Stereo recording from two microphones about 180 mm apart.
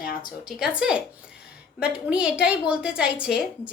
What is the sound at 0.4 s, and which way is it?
A woman's voice, 5° right (ahead or behind).